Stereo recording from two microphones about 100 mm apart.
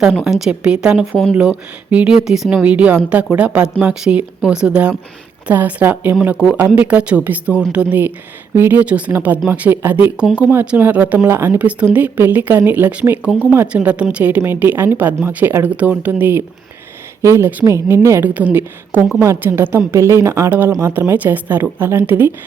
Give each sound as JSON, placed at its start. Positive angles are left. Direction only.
{"t": 0.3, "sound": "a woman's voice", "side_deg": -5}